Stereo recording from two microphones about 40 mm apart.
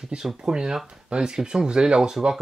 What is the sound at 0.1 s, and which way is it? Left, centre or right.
Speech, right.